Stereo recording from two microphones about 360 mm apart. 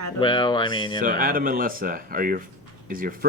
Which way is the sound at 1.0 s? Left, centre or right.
Right.